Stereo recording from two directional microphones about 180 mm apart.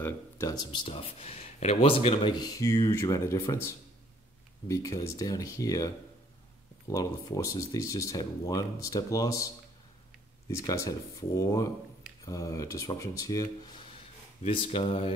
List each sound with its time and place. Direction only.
0.0 s speech: 20° left (ahead or behind)
6.9 s speech: 20° left (ahead or behind)
10.7 s speech: 20° left (ahead or behind)
14.4 s speech: 30° left (ahead or behind)